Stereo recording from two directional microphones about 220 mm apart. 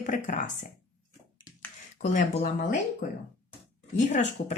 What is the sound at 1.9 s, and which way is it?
Speech, 35° left (ahead or behind).